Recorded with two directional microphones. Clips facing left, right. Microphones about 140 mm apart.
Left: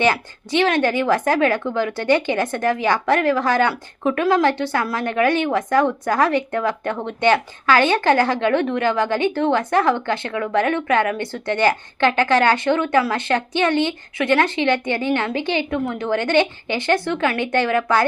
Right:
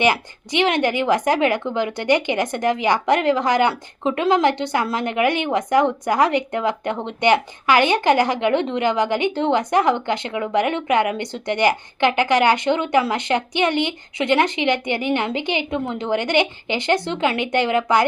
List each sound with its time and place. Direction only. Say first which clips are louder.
0.0 s a woman's voice: even; 15° right (ahead or behind)